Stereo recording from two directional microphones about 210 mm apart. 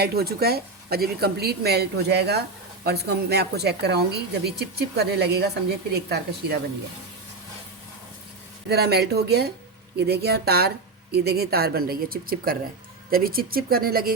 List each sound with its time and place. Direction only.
0.0 s a woman's voice: 50° right (ahead or behind)
8.7 s a woman's voice: 50° right (ahead or behind)